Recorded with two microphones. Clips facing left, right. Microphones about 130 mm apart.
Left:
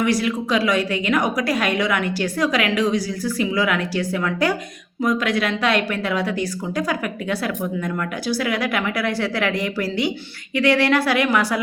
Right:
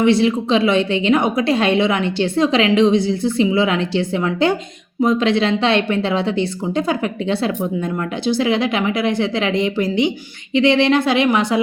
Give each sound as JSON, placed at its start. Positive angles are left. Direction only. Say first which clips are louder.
{"t": 0.0, "sound": "a woman's voice", "louder": "right 6 dB", "side_deg": -25}